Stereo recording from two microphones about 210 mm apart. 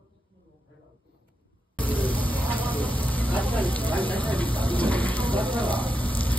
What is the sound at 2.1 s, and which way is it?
Vehicle, 5° left (ahead or behind).